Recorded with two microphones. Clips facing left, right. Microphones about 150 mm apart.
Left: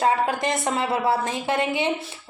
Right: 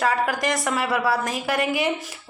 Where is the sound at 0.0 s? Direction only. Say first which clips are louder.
Left 1 dB; 25° left (ahead or behind).